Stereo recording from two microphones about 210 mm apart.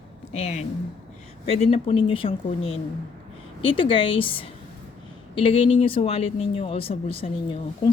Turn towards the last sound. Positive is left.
turn(degrees=25)  # may be behind; listen again after turning